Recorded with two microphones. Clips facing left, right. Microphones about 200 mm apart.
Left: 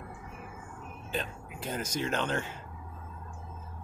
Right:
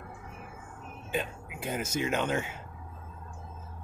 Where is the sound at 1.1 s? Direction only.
10° right (ahead or behind).